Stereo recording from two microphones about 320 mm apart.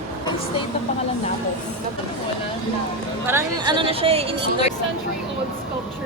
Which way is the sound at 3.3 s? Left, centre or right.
Centre.